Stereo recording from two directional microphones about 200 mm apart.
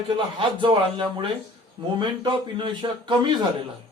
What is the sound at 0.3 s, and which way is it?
A man's voice, 25° right (ahead or behind).